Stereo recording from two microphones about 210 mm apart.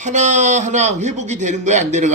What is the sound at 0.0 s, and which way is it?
Speech, 35° right (ahead or behind).